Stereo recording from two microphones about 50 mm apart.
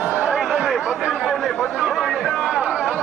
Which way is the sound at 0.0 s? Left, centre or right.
Right.